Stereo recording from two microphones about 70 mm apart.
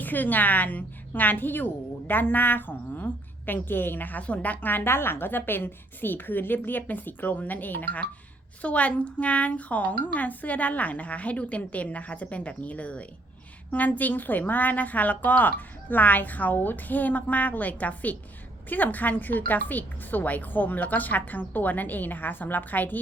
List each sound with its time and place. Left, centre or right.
0.0 s a woman's voice: left